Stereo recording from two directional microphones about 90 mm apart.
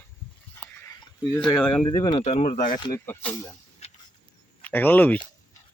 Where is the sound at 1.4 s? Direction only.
10° left (ahead or behind).